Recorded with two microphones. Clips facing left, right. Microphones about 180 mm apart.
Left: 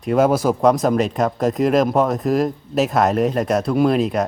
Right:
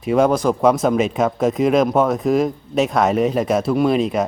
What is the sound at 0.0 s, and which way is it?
Speech, centre (ahead or behind).